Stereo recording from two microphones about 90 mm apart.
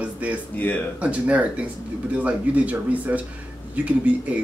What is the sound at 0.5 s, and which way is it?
Speech, 20° left (ahead or behind).